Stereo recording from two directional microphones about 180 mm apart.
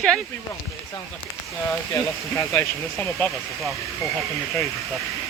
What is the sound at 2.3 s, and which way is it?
Speech, 15° left (ahead or behind).